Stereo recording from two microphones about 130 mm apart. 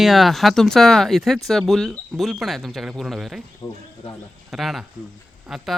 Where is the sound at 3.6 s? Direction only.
35° left (ahead or behind).